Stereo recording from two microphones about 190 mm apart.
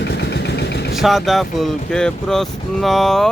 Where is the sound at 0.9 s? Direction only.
Centre (ahead or behind).